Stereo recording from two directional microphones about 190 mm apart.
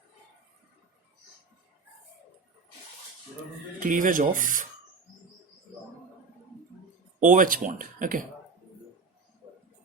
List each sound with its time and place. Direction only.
3.8 s speech: 45° right (ahead or behind)
7.2 s speech: 45° right (ahead or behind)